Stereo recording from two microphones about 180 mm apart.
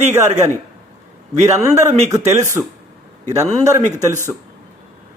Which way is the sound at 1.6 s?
20° right (ahead or behind).